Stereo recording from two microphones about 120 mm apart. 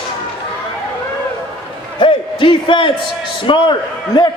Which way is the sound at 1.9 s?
45° left (ahead or behind).